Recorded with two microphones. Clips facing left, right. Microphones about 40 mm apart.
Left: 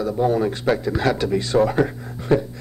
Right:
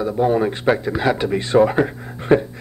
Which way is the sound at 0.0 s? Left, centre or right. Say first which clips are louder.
Right 2 dB; right.